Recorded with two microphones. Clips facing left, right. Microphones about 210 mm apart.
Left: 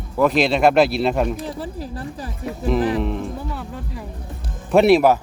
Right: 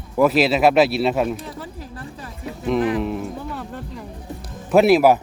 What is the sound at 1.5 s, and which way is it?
Speech, 35° left (ahead or behind).